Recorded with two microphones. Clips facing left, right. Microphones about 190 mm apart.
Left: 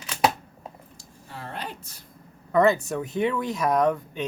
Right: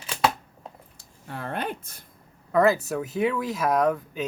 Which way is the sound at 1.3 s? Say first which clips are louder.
Right 5 dB; 55° right (ahead or behind).